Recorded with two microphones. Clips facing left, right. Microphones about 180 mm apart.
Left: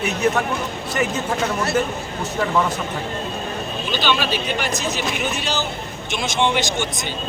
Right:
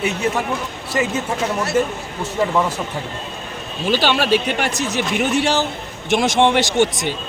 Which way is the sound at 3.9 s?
75° right (ahead or behind).